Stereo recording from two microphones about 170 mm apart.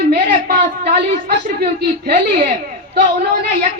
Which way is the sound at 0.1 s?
60° right (ahead or behind).